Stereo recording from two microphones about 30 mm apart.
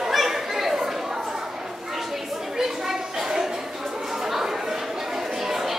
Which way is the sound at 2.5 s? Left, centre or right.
Centre.